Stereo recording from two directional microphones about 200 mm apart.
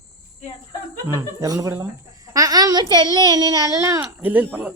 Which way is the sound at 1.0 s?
15° right (ahead or behind).